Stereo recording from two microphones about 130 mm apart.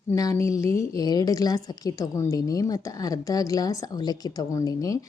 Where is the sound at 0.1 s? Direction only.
25° left (ahead or behind).